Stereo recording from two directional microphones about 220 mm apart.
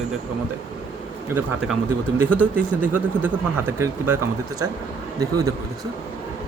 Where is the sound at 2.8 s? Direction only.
10° right (ahead or behind).